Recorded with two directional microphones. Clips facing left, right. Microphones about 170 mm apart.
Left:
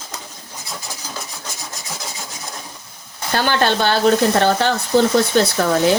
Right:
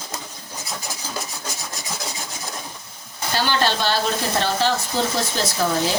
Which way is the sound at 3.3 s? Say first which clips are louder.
Left 4 dB; 55° left (ahead or behind).